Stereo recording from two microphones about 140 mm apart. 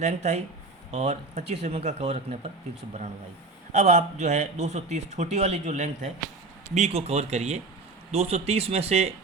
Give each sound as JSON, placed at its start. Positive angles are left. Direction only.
{"t": 0.0, "sound": "speech", "side_deg": -55}
{"t": 3.7, "sound": "a man's voice", "side_deg": -55}